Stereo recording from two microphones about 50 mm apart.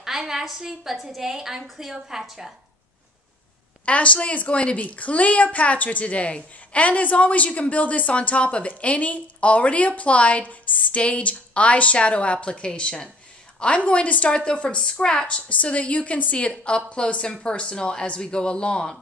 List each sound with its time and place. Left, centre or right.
0.0 s a woman's voice: centre
3.8 s a woman's voice: left